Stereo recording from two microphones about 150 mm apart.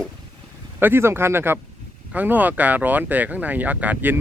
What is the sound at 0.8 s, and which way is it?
Speech, 15° right (ahead or behind).